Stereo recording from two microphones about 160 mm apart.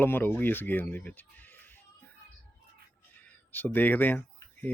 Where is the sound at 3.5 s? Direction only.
10° left (ahead or behind).